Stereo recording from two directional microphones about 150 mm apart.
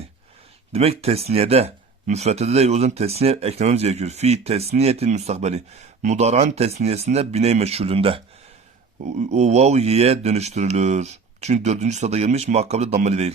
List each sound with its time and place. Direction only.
0.7 s speech: 40° right (ahead or behind)